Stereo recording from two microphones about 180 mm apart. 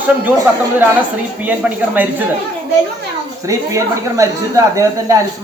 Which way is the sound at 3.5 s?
15° right (ahead or behind).